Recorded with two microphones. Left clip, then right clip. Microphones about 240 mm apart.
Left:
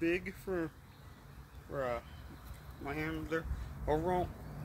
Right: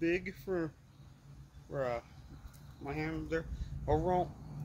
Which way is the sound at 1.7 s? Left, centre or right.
Centre.